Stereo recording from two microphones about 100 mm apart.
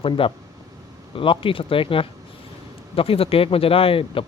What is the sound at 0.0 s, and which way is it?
Speech, 65° left (ahead or behind).